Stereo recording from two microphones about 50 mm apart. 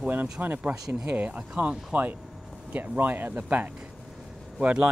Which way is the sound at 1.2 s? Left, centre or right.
Right.